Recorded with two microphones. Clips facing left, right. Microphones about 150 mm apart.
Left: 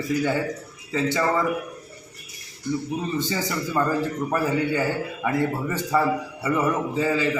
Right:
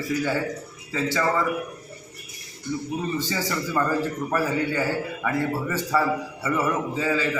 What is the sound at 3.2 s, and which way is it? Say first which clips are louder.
Speech: left 1 dB; 15° left (ahead or behind).